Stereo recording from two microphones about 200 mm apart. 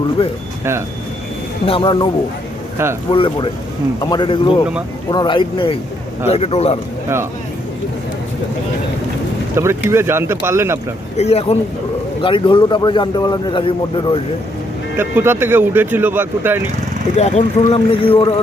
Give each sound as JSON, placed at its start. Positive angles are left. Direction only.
{"t": 0.2, "sound": "a man's voice", "side_deg": 30}
{"t": 1.6, "sound": "a man's voice", "side_deg": 25}
{"t": 3.1, "sound": "a man's voice", "side_deg": 25}
{"t": 9.6, "sound": "speech", "side_deg": -15}
{"t": 11.2, "sound": "a man's voice", "side_deg": 30}
{"t": 14.9, "sound": "speech", "side_deg": -10}
{"t": 17.2, "sound": "a man's voice", "side_deg": 30}